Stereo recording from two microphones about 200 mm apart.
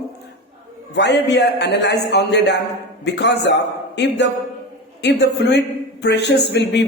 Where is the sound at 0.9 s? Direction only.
60° left (ahead or behind).